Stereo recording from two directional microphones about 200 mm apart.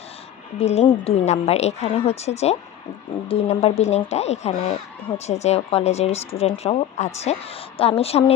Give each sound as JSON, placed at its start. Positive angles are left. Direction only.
{"t": 0.6, "sound": "speech", "side_deg": 35}